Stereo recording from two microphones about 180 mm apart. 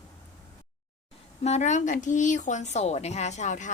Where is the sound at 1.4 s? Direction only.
40° left (ahead or behind).